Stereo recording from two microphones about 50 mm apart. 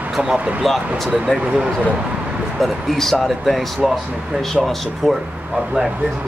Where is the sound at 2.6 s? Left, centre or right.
Centre.